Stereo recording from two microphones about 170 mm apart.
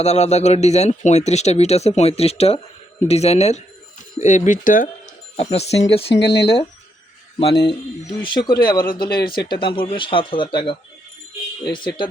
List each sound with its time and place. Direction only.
0.0 s speech: 40° left (ahead or behind)
5.4 s speech: 35° left (ahead or behind)
6.1 s speech: 80° left
7.3 s speech: 35° left (ahead or behind)
9.2 s speech: 65° left (ahead or behind)
9.5 s speech: 30° left (ahead or behind)